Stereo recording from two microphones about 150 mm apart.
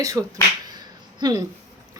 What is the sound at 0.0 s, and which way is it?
Speech, 20° right (ahead or behind).